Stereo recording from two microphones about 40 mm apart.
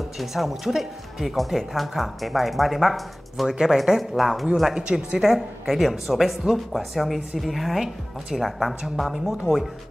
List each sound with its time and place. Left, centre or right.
0.2 s speech: centre
3.4 s speech: centre
4.7 s a woman's voice: right
5.2 s speech: centre